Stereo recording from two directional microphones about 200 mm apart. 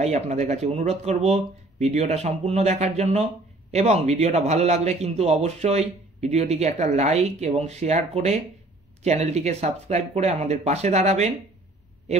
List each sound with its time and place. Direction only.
0.0 s a man's voice: 35° right (ahead or behind)